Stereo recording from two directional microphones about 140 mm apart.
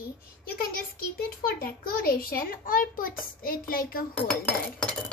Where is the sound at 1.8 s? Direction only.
90° left.